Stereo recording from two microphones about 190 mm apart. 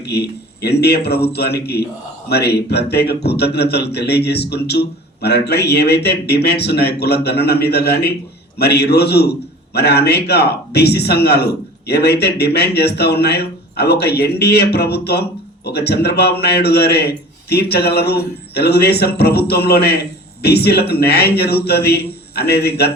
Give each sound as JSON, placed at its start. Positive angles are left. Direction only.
{"t": 0.0, "sound": "a man's voice", "side_deg": 60}